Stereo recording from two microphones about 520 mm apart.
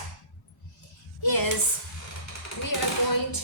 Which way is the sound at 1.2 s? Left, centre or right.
Left.